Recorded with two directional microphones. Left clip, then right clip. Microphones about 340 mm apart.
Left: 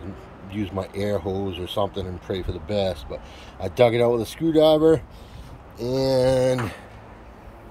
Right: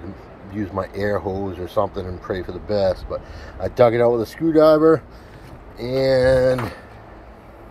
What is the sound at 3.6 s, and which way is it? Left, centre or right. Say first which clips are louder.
Speech: right 3 dB; centre.